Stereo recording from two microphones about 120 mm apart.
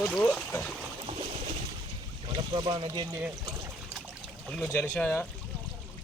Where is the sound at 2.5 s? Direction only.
40° right (ahead or behind).